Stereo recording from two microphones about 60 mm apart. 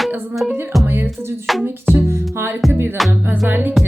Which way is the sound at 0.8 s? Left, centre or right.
Right.